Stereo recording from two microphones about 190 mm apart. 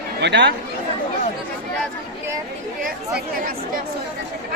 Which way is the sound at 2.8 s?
50° right (ahead or behind).